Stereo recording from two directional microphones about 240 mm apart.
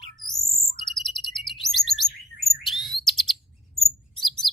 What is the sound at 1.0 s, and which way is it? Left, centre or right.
Chirp, centre.